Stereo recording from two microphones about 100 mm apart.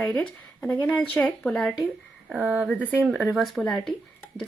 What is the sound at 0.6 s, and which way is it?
Speech, 15° left (ahead or behind).